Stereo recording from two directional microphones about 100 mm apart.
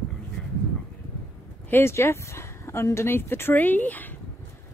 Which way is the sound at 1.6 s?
20° left (ahead or behind).